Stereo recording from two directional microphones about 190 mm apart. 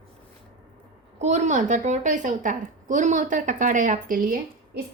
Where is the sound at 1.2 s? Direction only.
40° right (ahead or behind).